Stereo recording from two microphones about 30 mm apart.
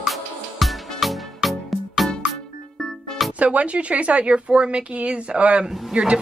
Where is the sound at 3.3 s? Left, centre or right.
Right.